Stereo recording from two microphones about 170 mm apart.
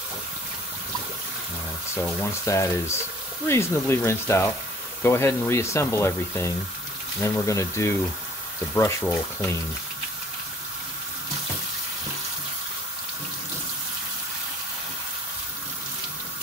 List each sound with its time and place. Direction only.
2.1 s speech: 15° left (ahead or behind)